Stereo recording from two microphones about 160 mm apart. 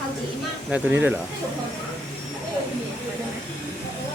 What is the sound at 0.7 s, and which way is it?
Speech, 10° right (ahead or behind).